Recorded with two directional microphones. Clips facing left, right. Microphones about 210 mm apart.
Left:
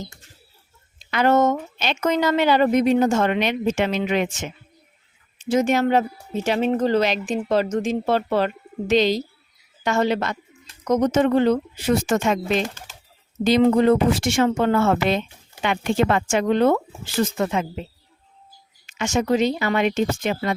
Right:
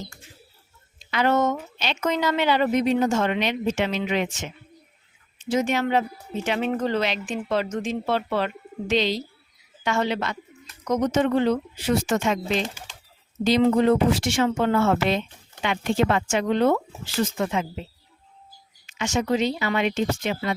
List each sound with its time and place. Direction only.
1.1 s speech: 45° left (ahead or behind)
18.9 s speech: 50° left (ahead or behind)